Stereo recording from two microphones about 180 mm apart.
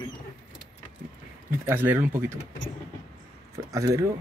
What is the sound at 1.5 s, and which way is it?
Speech, 10° right (ahead or behind).